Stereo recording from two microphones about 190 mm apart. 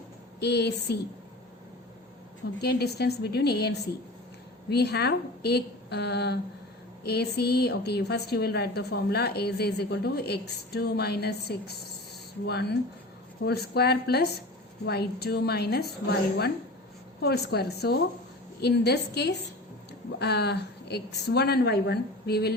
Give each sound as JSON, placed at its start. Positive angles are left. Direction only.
{"t": 0.3, "sound": "a woman's voice", "side_deg": 60}
{"t": 2.6, "sound": "a woman's voice", "side_deg": 60}